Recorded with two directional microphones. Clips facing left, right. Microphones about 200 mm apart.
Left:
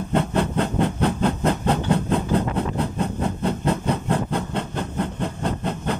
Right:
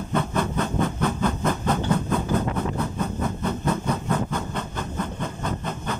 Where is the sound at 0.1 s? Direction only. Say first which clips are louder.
Left 3 dB; 30° left (ahead or behind).